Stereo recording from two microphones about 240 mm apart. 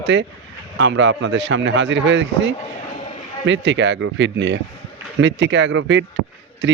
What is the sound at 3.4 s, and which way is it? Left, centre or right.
Speech, right.